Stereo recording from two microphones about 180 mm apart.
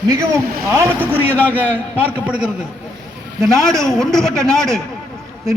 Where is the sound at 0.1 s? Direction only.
15° right (ahead or behind).